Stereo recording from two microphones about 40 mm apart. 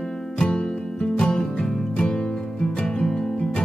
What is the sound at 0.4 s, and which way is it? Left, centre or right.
Music, centre.